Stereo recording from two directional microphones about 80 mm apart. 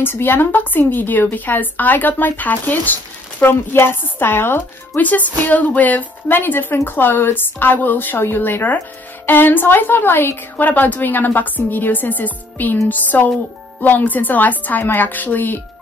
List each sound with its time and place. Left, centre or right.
0.0 s a woman's voice: left